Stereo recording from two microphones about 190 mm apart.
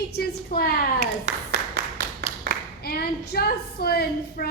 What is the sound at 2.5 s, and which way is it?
Clapping, 60° right (ahead or behind).